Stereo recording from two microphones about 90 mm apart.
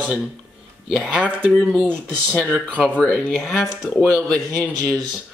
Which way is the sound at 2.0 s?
15° right (ahead or behind).